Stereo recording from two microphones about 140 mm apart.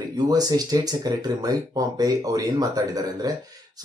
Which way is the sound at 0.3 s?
25° right (ahead or behind).